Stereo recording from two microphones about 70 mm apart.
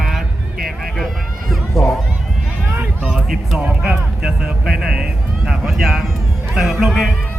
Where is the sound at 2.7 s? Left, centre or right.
Right.